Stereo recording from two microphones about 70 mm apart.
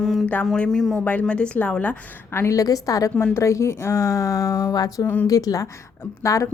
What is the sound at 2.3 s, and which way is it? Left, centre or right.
Speech, left.